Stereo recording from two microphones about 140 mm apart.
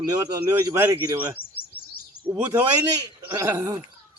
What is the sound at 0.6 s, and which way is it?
Mantra, 20° right (ahead or behind).